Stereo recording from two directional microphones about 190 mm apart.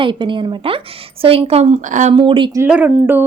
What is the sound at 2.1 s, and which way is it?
Speech, 25° right (ahead or behind).